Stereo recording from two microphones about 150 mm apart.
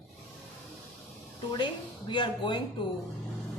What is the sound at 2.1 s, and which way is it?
Speech, 30° left (ahead or behind).